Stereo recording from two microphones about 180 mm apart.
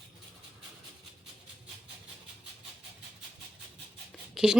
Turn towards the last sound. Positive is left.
turn(degrees=-5)  # may be behind; listen again after turning